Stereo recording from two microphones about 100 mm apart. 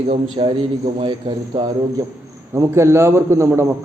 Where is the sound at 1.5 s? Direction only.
40° right (ahead or behind).